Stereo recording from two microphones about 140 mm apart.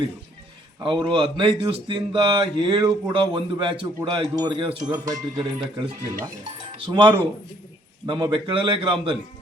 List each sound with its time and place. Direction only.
0.8 s speech: 35° right (ahead or behind)